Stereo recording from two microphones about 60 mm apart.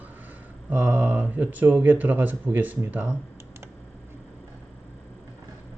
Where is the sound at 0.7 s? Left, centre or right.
Right.